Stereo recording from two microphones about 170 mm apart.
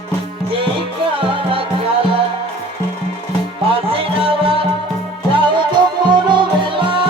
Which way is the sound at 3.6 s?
35° right (ahead or behind).